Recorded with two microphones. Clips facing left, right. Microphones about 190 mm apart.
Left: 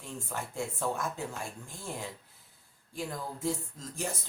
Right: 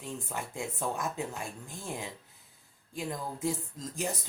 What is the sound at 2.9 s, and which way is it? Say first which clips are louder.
A man's voice: right 1 dB; 15° right (ahead or behind).